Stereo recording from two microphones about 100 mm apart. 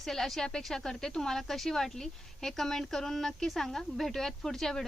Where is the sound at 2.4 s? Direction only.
5° left (ahead or behind).